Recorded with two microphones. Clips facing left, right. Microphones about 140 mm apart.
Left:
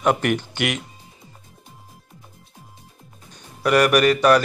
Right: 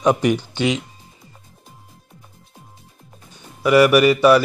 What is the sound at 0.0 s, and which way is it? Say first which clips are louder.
Speech: right 3 dB; 15° right (ahead or behind).